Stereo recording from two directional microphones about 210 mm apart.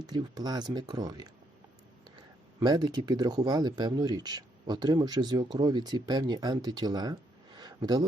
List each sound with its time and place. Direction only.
0.0 s speech: 20° right (ahead or behind)
2.6 s speech: 20° right (ahead or behind)